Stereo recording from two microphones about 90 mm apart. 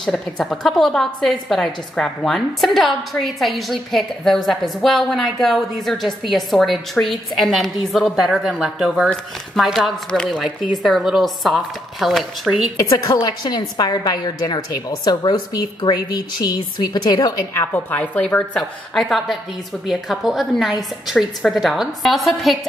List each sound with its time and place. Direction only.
0.0 s a woman's voice: 5° left (ahead or behind)
10.1 s a woman's voice: 10° left (ahead or behind)
10.8 s a woman's voice: 5° right (ahead or behind)
12.7 s a woman's voice: 45° left (ahead or behind)
17.6 s a woman's voice: 20° left (ahead or behind)
18.6 s a woman's voice: centre (ahead or behind)